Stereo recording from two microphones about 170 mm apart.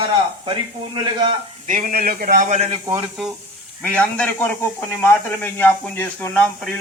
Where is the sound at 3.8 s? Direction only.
5° left (ahead or behind).